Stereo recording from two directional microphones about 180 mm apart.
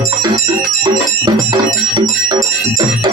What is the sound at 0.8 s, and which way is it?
Music, 20° right (ahead or behind).